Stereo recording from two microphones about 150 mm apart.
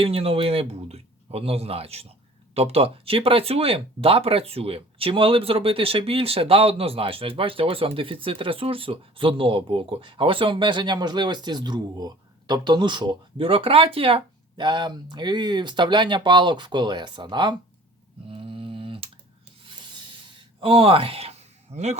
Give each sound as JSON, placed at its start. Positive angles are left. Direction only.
{"t": 0.0, "sound": "speech", "side_deg": -40}
{"t": 18.3, "sound": "tick", "side_deg": -35}
{"t": 20.6, "sound": "speech", "side_deg": -40}